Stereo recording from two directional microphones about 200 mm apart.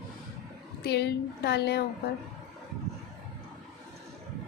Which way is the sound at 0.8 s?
55° left (ahead or behind).